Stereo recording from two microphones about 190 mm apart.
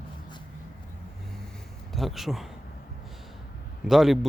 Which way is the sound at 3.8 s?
Centre (ahead or behind).